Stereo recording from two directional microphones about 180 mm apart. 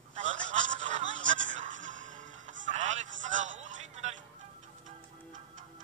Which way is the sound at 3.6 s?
40° right (ahead or behind).